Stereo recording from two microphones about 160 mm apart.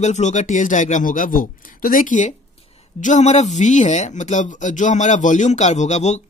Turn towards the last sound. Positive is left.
turn(degrees=45)  # may be behind; listen again after turning